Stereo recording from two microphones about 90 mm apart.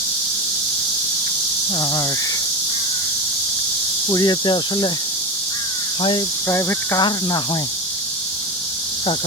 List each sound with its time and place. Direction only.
1.8 s speech: 45° left (ahead or behind)
4.1 s speech: 55° left (ahead or behind)
6.0 s speech: 65° left (ahead or behind)
6.5 s speech: 25° left (ahead or behind)
6.9 s speech: 50° left (ahead or behind)